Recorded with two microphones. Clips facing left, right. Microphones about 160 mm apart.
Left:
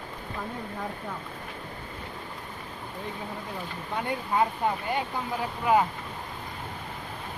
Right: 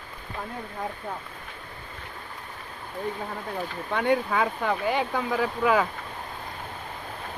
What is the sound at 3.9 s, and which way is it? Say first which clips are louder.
Speech: right 5 dB; 80° right.